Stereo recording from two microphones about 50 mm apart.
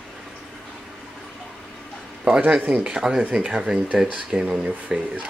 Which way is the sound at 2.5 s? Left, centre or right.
Centre.